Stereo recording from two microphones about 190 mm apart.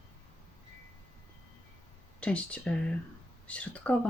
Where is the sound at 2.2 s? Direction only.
5° left (ahead or behind).